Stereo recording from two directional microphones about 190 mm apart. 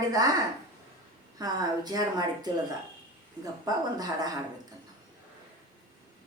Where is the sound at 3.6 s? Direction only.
20° right (ahead or behind).